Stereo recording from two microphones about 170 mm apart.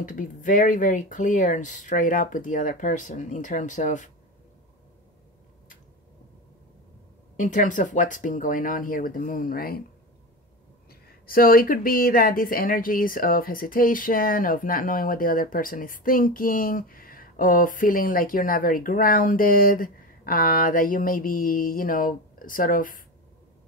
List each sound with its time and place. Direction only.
0.0 s speech: 50° left (ahead or behind)
7.3 s speech: 50° left (ahead or behind)
10.9 s a woman's voice: 60° left (ahead or behind)